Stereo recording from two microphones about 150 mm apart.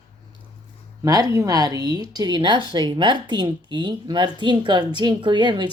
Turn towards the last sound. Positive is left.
turn(degrees=-30)  # may be behind; listen again after turning